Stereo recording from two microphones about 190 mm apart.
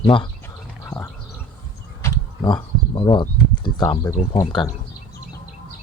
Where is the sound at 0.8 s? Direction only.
15° left (ahead or behind).